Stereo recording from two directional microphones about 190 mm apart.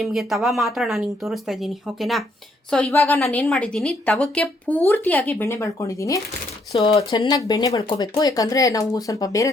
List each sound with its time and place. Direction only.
0.0 s a woman's voice: centre (ahead or behind); by 9.5 s 20° left (ahead or behind)